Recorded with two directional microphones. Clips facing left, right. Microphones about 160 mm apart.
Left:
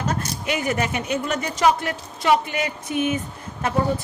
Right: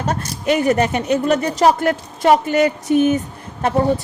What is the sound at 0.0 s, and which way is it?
A woman's voice, 35° right (ahead or behind).